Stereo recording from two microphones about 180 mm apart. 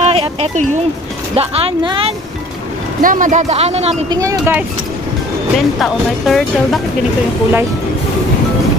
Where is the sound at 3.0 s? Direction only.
50° right (ahead or behind).